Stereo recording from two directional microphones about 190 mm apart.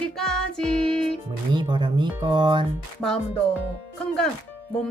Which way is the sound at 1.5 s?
25° right (ahead or behind).